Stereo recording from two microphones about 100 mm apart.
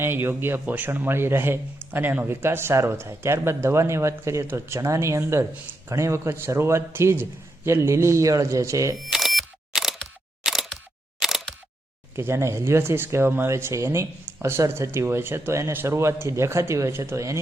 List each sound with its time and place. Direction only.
0.0 s a man's voice: 25° right (ahead or behind)
9.1 s camera: centre (ahead or behind)
10.4 s single-lens reflex camera: 5° right (ahead or behind)
12.1 s a man's voice: 25° right (ahead or behind)